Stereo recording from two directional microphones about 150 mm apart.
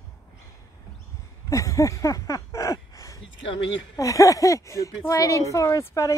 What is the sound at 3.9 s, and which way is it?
A woman's voice, 20° left (ahead or behind).